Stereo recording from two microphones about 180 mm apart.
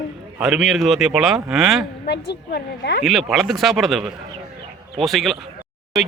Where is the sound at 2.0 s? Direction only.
70° left (ahead or behind).